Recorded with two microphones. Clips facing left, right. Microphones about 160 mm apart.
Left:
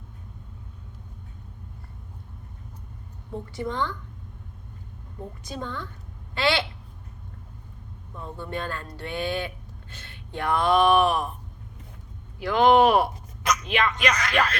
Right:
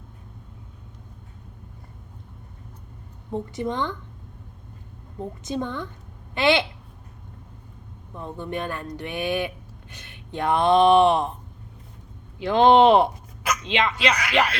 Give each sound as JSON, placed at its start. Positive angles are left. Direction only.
{"t": 3.5, "sound": "speech", "side_deg": -20}
{"t": 5.2, "sound": "speech", "side_deg": -20}
{"t": 8.1, "sound": "speech", "side_deg": -20}
{"t": 12.4, "sound": "speech", "side_deg": -25}
{"t": 14.1, "sound": "speech", "side_deg": -10}